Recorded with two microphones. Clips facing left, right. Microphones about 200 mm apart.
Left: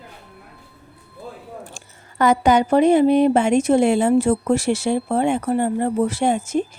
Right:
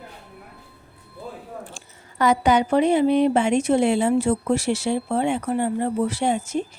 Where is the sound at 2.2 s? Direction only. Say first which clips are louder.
Left 3 dB; 45° left (ahead or behind).